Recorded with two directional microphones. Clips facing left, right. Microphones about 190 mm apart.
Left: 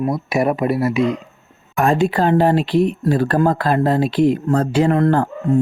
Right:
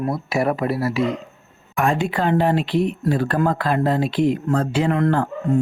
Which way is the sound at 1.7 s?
40° left (ahead or behind).